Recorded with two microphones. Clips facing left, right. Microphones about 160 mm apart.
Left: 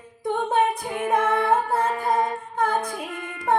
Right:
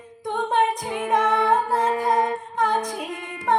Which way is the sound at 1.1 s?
5° left (ahead or behind).